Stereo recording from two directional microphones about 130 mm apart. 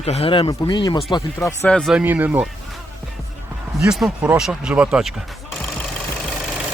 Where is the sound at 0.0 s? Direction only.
50° left (ahead or behind).